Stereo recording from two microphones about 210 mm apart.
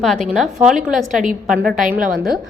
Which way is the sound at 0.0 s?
Centre (ahead or behind).